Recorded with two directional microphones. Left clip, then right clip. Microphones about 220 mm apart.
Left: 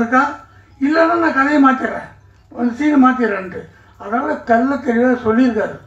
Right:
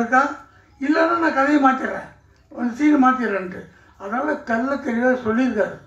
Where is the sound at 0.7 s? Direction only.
50° right (ahead or behind).